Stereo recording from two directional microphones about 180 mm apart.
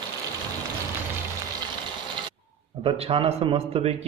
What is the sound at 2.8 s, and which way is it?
Speech, 30° right (ahead or behind).